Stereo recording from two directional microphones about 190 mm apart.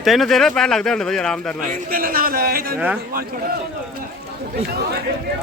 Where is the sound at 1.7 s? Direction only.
50° right (ahead or behind).